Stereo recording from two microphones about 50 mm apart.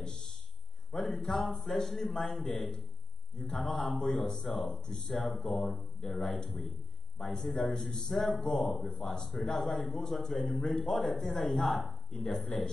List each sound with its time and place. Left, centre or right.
0.0 s a sound: centre
1.7 s a man's voice: centre
4.8 s a man's voice: centre
5.1 s a man's voice: centre
11.7 s a man's voice: centre
12.1 s speech: centre